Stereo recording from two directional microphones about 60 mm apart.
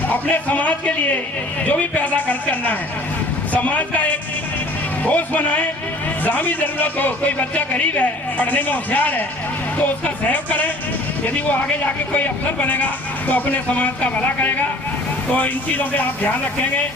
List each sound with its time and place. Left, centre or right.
0.1 s speech: left
12.1 s speech: left